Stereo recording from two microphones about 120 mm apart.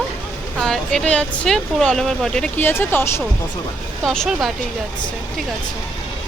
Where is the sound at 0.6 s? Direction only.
5° left (ahead or behind).